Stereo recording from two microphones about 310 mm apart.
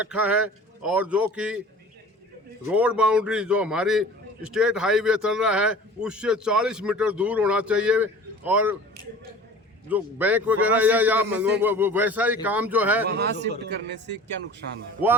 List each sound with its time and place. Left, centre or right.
0.0 s a man's voice: centre
2.7 s a man's voice: centre
9.9 s a man's voice: centre
13.1 s a man's voice: right